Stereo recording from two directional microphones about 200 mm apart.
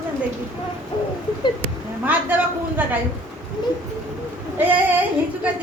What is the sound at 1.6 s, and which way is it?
Speech, 10° right (ahead or behind).